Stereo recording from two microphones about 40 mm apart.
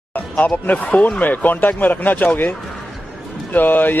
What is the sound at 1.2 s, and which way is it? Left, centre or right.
Speech, left.